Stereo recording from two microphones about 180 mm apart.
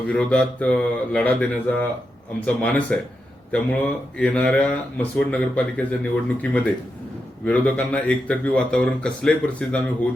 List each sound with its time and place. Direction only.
0.1 s speech: 5° left (ahead or behind)